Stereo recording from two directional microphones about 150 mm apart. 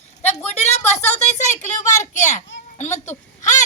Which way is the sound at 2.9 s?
55° left (ahead or behind).